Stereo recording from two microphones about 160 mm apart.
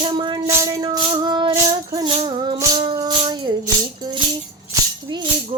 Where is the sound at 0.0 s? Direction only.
30° right (ahead or behind).